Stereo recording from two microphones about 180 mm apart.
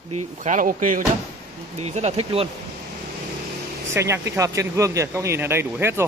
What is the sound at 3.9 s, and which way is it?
Speech, 15° right (ahead or behind).